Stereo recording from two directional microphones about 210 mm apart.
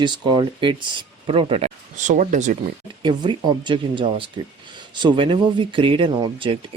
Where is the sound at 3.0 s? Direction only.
20° right (ahead or behind).